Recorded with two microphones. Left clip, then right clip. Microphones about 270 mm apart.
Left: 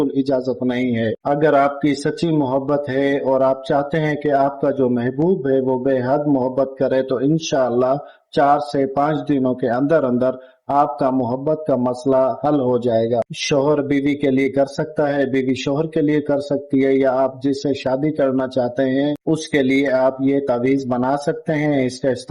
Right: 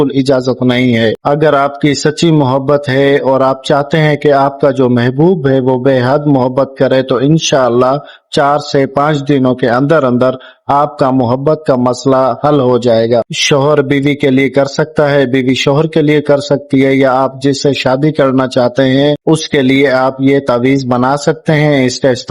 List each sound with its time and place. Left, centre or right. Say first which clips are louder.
0.3 s a man's voice: right 9 dB; right